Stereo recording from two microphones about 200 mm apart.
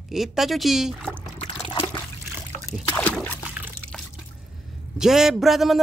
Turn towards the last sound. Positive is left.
turn(degrees=0)  # may be behind; listen again after turning